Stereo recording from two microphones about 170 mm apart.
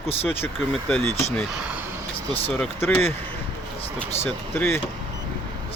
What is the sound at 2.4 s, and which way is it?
Speech, 10° left (ahead or behind).